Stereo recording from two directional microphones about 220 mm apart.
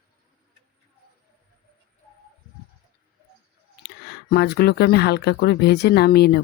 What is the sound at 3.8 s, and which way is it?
Speech, 50° left (ahead or behind).